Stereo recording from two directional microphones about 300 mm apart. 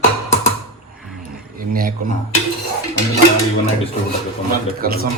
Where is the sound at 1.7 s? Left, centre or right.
Right.